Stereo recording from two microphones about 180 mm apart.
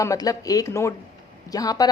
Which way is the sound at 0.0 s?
20° left (ahead or behind).